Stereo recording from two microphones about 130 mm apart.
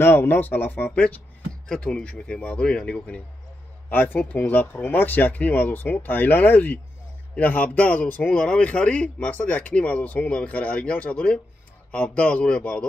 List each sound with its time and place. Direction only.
0.0 s speech: 15° left (ahead or behind)